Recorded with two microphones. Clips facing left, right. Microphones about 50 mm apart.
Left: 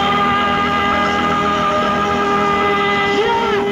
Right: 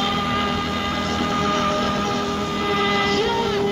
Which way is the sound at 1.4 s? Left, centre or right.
Left.